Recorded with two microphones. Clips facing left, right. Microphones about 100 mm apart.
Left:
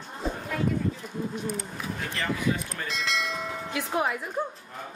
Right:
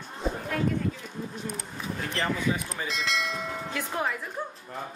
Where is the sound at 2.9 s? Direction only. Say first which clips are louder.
Even; centre (ahead or behind).